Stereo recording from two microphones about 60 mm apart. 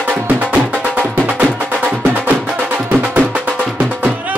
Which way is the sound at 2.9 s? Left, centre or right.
Right.